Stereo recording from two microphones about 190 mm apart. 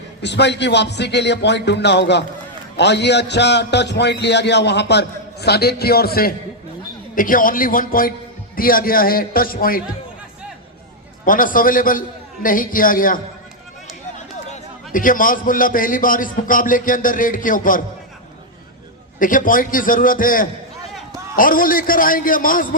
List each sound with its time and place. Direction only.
0.2 s a man's voice: 65° left (ahead or behind)
11.3 s a man's voice: 45° left (ahead or behind)
14.5 s a man's voice: 45° left (ahead or behind)
19.2 s a man's voice: 45° left (ahead or behind)